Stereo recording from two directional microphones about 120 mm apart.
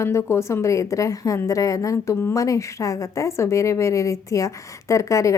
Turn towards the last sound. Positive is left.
turn(degrees=25)  # may be behind; listen again after turning